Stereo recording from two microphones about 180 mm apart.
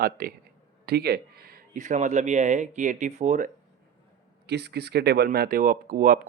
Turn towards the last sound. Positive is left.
turn(degrees=-50)  # may be behind; listen again after turning